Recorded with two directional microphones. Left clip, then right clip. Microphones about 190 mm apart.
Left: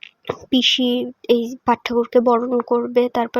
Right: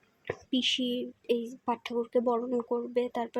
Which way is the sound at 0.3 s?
20° left (ahead or behind).